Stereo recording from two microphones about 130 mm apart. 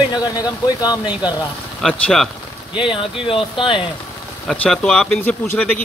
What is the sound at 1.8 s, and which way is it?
Speech, 5° left (ahead or behind).